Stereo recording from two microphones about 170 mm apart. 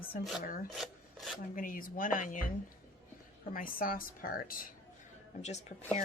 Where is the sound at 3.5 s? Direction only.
55° left (ahead or behind).